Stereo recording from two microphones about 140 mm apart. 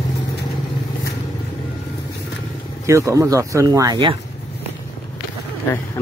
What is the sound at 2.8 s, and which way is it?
Speech, 20° right (ahead or behind).